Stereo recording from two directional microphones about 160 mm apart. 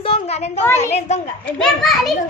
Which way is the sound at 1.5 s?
Centre (ahead or behind).